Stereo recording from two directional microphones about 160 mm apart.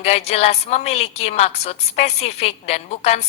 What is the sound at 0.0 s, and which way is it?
A woman's voice, 40° left (ahead or behind).